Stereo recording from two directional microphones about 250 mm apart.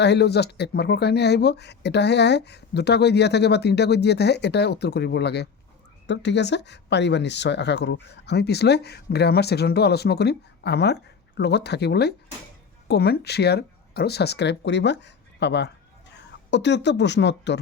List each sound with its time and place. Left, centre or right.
0.0 s speech: left